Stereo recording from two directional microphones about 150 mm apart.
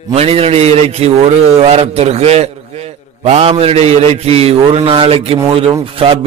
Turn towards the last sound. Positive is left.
turn(degrees=-35)  # may be behind; listen again after turning